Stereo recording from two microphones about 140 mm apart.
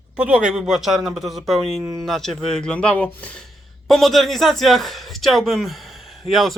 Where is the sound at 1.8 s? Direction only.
20° right (ahead or behind).